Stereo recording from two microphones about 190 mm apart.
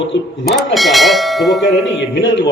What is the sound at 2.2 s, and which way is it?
Speech, 70° left (ahead or behind).